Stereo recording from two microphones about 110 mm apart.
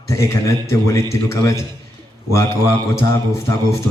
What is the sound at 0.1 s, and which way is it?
Speech, 25° left (ahead or behind).